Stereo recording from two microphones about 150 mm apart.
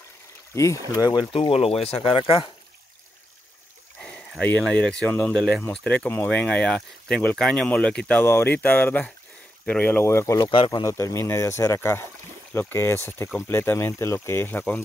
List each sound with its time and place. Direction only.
0.6 s speech: 20° left (ahead or behind)
1.5 s speech: 40° left (ahead or behind)
4.0 s speech: 5° left (ahead or behind); by 10.5 s 20° left (ahead or behind)
10.5 s speech: 30° left (ahead or behind); by 14.8 s 10° left (ahead or behind)